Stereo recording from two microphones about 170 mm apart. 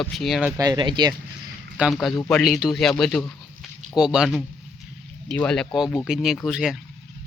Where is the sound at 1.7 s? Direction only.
5° right (ahead or behind).